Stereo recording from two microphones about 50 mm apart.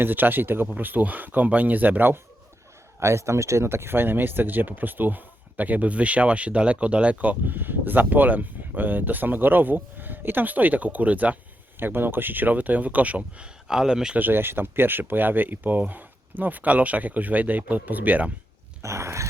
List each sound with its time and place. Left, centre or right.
0.0 s speech: right
3.0 s speech: right
11.8 s speech: right
13.7 s speech: centre
14.2 s speech: right
18.8 s dog: right